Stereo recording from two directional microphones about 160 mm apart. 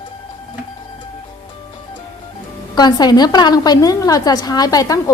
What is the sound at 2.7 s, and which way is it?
A woman's voice, 25° left (ahead or behind).